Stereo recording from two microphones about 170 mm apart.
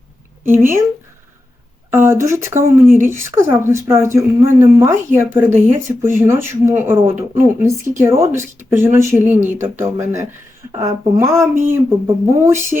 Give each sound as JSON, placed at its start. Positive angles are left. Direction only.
{"t": 0.4, "sound": "speech", "side_deg": -15}
{"t": 1.9, "sound": "speech", "side_deg": -15}